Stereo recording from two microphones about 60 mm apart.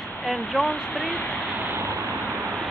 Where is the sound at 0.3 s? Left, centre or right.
Centre.